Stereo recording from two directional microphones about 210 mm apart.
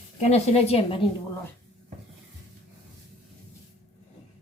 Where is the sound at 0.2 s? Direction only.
30° left (ahead or behind).